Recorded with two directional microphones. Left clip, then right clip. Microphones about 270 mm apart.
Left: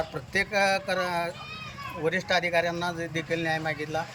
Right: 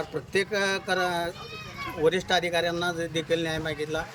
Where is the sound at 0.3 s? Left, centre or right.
Centre.